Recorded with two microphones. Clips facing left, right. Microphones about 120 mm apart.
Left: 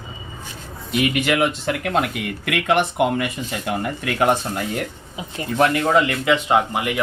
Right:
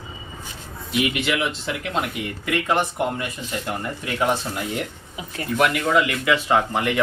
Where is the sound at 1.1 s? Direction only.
50° left (ahead or behind).